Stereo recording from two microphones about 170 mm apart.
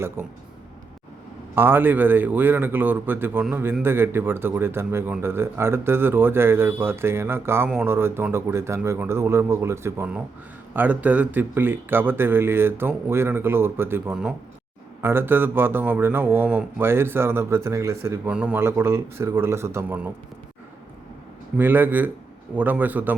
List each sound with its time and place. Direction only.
0.2 s speech: 15° right (ahead or behind)
1.5 s speech: 10° right (ahead or behind)
18.3 s speech: 5° right (ahead or behind)
21.6 s speech: 10° right (ahead or behind)